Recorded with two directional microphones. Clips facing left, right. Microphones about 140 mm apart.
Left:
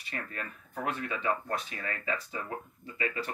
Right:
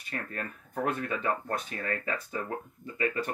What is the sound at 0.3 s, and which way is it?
Speech, 40° right (ahead or behind).